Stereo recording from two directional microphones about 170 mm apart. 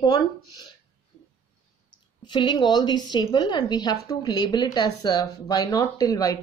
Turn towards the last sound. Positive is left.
turn(degrees=20)  # may be behind; listen again after turning